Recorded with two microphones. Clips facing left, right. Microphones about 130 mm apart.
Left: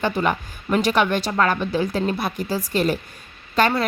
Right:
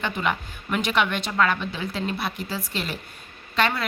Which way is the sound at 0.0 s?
40° left (ahead or behind).